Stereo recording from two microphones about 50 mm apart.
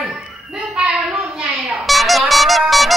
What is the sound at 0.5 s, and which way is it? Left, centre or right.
Speech, centre.